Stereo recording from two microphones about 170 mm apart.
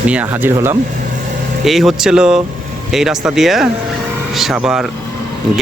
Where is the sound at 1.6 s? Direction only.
Centre (ahead or behind).